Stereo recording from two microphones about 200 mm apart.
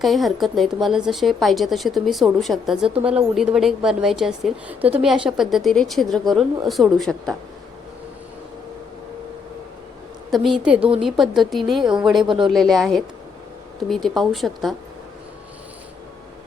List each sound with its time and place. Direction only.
0.0 s a woman's voice: centre (ahead or behind)
10.3 s a woman's voice: centre (ahead or behind)